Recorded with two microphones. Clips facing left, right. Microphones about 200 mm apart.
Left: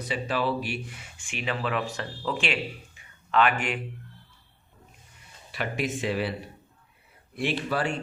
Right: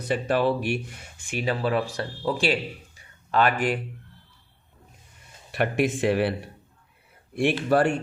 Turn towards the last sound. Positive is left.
turn(degrees=-55)  # may be behind; listen again after turning